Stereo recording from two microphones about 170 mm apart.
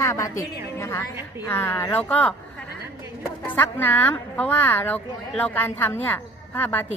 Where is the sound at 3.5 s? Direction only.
10° left (ahead or behind).